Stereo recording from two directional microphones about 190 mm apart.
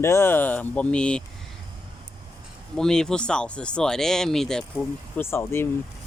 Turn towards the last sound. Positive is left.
turn(degrees=15)  # may be behind; listen again after turning